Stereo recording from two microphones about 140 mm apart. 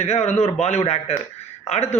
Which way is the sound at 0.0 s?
55° left (ahead or behind).